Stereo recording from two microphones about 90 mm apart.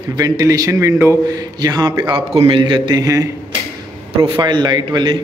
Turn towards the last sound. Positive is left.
turn(degrees=-55)  # may be behind; listen again after turning